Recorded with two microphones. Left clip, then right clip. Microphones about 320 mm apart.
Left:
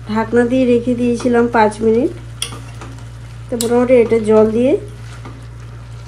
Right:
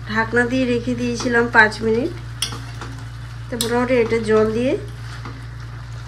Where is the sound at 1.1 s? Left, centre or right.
Left.